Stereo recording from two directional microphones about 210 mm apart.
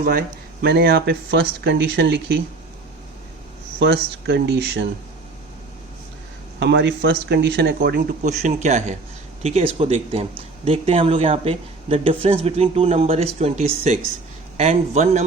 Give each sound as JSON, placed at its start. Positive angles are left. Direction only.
{"t": 0.0, "sound": "speech", "side_deg": -45}
{"t": 3.8, "sound": "speech", "side_deg": -55}
{"t": 6.6, "sound": "a man's voice", "side_deg": -55}